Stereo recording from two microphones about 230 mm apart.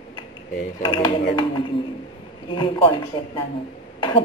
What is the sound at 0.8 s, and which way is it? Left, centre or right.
A woman's voice, left.